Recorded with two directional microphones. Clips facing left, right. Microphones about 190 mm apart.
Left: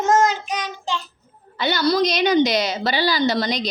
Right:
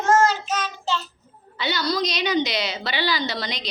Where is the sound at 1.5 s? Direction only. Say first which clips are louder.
Left 6 dB; 50° left (ahead or behind).